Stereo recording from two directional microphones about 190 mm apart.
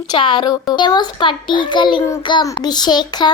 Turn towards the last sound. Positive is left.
turn(degrees=20)  # may be behind; listen again after turning